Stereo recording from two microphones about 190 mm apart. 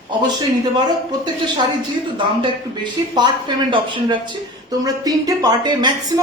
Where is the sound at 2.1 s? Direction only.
25° right (ahead or behind).